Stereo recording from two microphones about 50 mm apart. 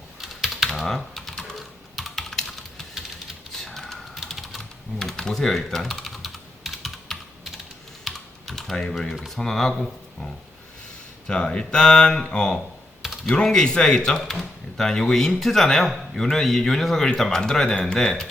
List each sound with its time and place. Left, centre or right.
0.2 s typing: centre
0.9 s typing: centre
3.5 s typewriter: centre
4.3 s typing: centre
9.2 s speech: centre
11.3 s speech: centre
14.2 s speech: centre